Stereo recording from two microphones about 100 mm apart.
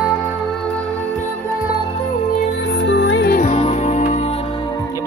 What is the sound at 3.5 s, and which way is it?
Music, 90° left.